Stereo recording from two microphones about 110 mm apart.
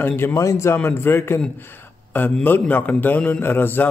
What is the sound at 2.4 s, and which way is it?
A man's voice, 20° left (ahead or behind).